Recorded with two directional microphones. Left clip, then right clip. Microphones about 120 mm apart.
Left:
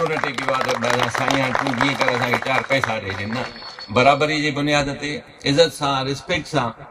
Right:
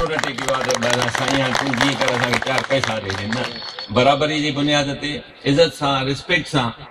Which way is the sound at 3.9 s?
15° left (ahead or behind).